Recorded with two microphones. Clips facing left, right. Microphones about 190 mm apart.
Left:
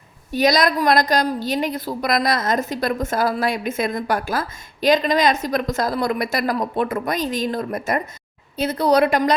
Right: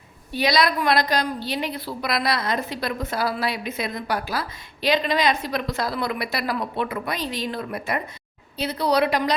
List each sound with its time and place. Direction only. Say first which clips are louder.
0.3 s a woman's voice: left 4 dB; 45° left (ahead or behind)